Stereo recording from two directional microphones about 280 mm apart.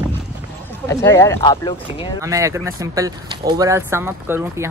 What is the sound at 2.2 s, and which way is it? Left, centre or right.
Speech, centre.